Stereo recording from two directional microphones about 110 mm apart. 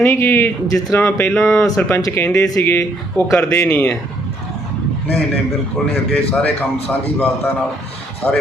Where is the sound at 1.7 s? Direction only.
5° left (ahead or behind).